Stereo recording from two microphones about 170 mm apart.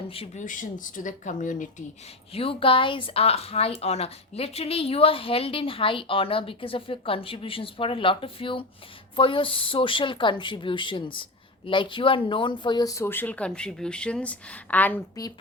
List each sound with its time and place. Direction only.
0.1 s speech: 35° left (ahead or behind)
0.4 s speech: 50° left (ahead or behind)
2.3 s speech: 35° left (ahead or behind); by 15.2 s 10° left (ahead or behind)